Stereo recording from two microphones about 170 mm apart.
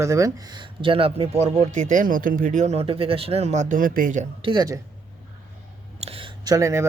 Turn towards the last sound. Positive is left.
turn(degrees=-15)  # may be behind; listen again after turning